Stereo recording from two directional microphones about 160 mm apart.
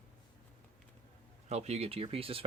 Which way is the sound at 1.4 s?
40° right (ahead or behind).